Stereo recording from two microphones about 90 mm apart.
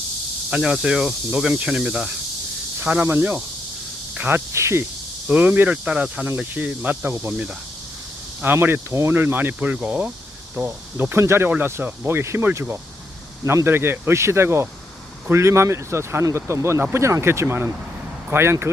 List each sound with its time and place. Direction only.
0.5 s speech: 10° right (ahead or behind)
2.8 s speech: 20° right (ahead or behind)
5.3 s speech: 20° right (ahead or behind)
8.5 s speech: 25° right (ahead or behind)